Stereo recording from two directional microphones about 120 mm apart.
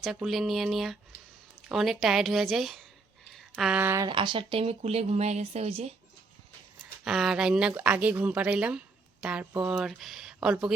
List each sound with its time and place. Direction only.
0.0 s speech: centre (ahead or behind)
3.3 s a sound: centre (ahead or behind)
3.8 s speech: 15° right (ahead or behind)
4.0 s speech: 40° right (ahead or behind); by 5.9 s 60° right (ahead or behind)
7.0 s speech: 5° right (ahead or behind)